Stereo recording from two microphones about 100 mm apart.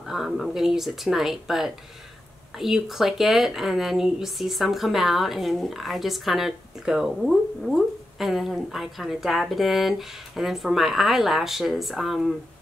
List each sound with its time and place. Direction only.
0.0 s speech: 5° right (ahead or behind)